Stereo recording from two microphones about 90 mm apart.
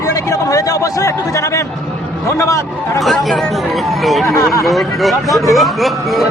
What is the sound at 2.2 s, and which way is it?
Speech, 35° left (ahead or behind).